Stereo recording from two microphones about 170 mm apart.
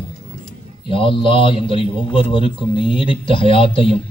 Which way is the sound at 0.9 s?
30° left (ahead or behind).